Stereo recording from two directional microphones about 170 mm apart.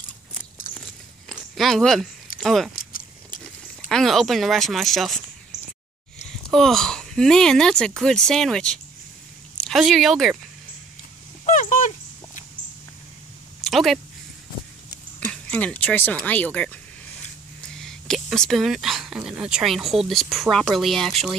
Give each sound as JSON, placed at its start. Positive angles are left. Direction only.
{"t": 1.3, "sound": "a sound", "side_deg": 0}
{"t": 2.4, "sound": "speech", "side_deg": 0}
{"t": 2.7, "sound": "biting", "side_deg": 55}
{"t": 3.9, "sound": "speech", "side_deg": 0}
{"t": 6.5, "sound": "speech", "side_deg": 0}
{"t": 11.4, "sound": "dog", "side_deg": 45}
{"t": 13.6, "sound": "a sound", "side_deg": 0}
{"t": 15.1, "sound": "speech", "side_deg": 10}